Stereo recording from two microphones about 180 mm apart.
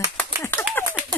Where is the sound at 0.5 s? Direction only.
10° left (ahead or behind).